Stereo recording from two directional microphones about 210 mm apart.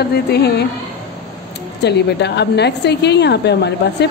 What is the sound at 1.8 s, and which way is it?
A woman's voice, 55° left (ahead or behind).